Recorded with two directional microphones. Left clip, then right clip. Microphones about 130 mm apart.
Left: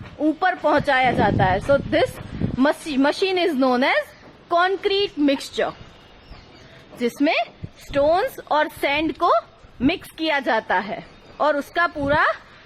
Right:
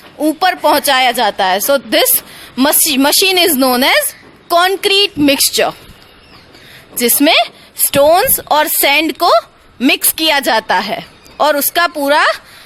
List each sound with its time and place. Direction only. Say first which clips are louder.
0.2 s a woman's voice: right 8 dB; 15° right (ahead or behind)
7.0 s a woman's voice: right 10 dB; 35° right (ahead or behind)